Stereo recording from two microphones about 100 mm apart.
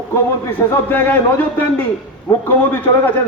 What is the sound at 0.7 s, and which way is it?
A man's voice, 20° left (ahead or behind).